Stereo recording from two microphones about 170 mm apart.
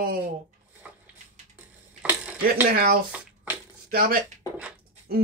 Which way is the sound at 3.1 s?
10° right (ahead or behind).